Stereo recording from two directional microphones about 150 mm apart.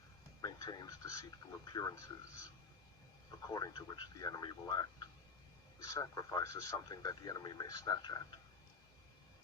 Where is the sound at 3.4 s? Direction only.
25° left (ahead or behind).